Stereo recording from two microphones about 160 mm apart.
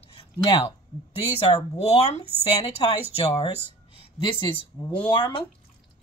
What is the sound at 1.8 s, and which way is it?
Speech, 40° left (ahead or behind).